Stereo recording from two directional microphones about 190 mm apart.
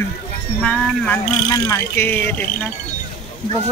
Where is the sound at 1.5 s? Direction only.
10° left (ahead or behind).